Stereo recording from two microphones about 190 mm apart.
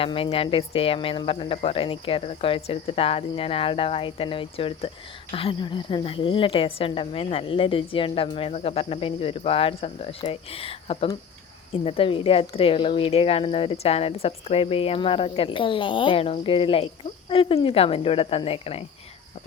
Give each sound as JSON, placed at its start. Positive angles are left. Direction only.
{"t": 0.0, "sound": "speech", "side_deg": 30}